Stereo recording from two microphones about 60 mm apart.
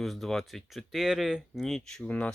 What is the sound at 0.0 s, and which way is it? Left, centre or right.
Speech, centre.